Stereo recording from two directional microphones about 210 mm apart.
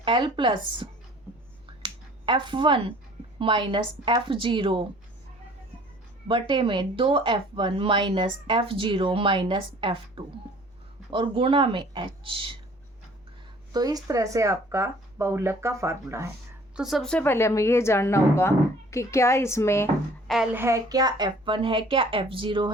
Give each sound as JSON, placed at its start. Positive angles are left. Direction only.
{"t": 0.0, "sound": "speech", "side_deg": -25}
{"t": 1.8, "sound": "finger snapping", "side_deg": -20}
{"t": 3.3, "sound": "speech", "side_deg": -25}
{"t": 6.2, "sound": "speech", "side_deg": -25}
{"t": 13.7, "sound": "speech", "side_deg": -15}
{"t": 16.7, "sound": "a woman's voice", "side_deg": 0}
{"t": 20.2, "sound": "speech", "side_deg": 0}